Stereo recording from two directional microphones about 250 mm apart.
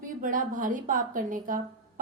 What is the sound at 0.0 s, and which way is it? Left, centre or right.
A woman's voice, right.